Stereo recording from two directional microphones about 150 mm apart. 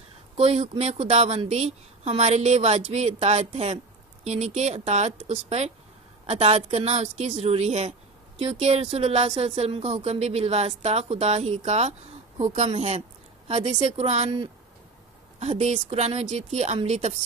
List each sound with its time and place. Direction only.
0.4 s a woman's voice: 45° right (ahead or behind)
15.3 s a woman's voice: 45° right (ahead or behind)